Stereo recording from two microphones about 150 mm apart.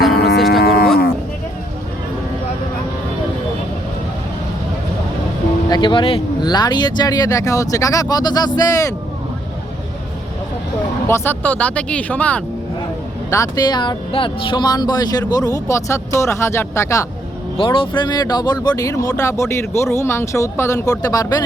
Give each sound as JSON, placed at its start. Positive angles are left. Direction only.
{"t": 0.1, "sound": "cattle", "side_deg": 90}
{"t": 0.3, "sound": "cattle", "side_deg": 0}
{"t": 0.6, "sound": "cattle", "side_deg": 90}
{"t": 5.6, "sound": "speech", "side_deg": 30}
{"t": 11.1, "sound": "speech", "side_deg": 15}
{"t": 13.3, "sound": "speech", "side_deg": 25}
{"t": 17.6, "sound": "speech", "side_deg": 35}